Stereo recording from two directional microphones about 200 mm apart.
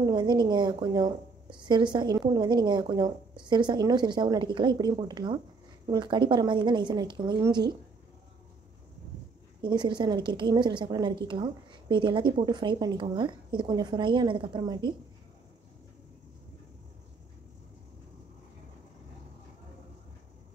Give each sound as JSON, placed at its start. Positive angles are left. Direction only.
{"t": 0.0, "sound": "a woman's voice", "side_deg": -20}
{"t": 9.6, "sound": "a woman's voice", "side_deg": -20}